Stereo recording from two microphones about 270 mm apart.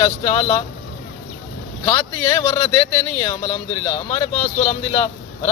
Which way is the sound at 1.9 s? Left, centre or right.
Centre.